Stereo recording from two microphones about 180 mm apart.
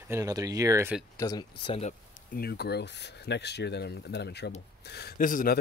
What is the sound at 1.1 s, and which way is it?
Speech, 20° left (ahead or behind).